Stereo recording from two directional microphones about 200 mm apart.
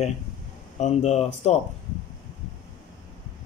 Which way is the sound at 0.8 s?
35° left (ahead or behind).